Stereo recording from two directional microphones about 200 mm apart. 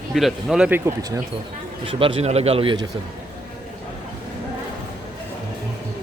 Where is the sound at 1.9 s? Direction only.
25° right (ahead or behind).